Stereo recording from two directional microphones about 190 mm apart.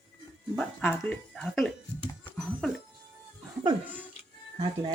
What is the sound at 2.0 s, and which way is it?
Music, 25° left (ahead or behind).